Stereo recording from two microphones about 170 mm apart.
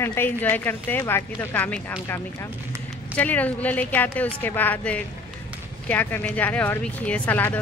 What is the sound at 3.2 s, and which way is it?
Speech, 10° left (ahead or behind).